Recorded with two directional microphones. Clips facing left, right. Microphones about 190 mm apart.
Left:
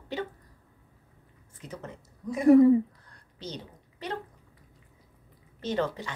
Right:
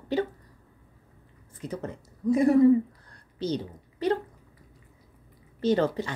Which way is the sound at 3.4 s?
35° right (ahead or behind).